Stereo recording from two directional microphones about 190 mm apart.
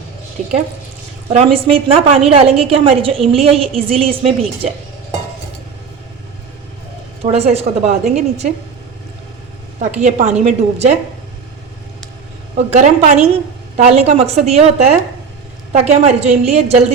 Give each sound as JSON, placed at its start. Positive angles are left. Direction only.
{"t": 0.4, "sound": "a woman's voice", "side_deg": -40}
{"t": 7.2, "sound": "a woman's voice", "side_deg": -35}
{"t": 10.0, "sound": "a woman's voice", "side_deg": -35}
{"t": 12.7, "sound": "a woman's voice", "side_deg": -35}